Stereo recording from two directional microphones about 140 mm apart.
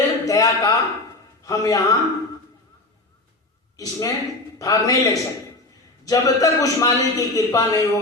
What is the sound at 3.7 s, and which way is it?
A woman's voice, 25° left (ahead or behind).